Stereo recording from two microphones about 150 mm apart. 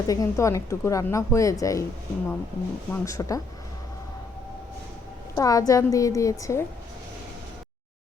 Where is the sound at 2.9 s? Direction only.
20° left (ahead or behind).